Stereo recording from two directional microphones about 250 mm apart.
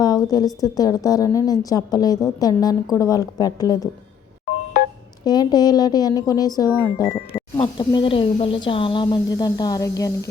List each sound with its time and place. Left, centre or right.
0.0 s speech: centre
5.2 s speech: centre